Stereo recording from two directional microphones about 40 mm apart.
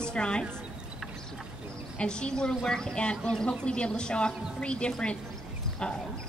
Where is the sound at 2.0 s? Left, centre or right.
Left.